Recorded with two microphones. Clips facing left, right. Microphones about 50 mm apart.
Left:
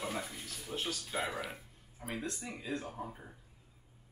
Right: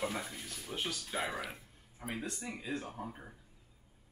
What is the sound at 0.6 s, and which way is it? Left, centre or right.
Speech, centre.